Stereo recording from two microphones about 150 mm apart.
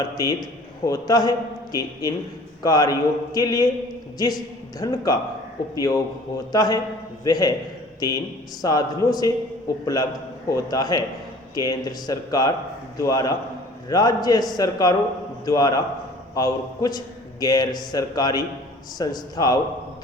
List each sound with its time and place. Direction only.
0.0 s a man's voice: 25° left (ahead or behind)
4.8 s a man's voice: 25° left (ahead or behind)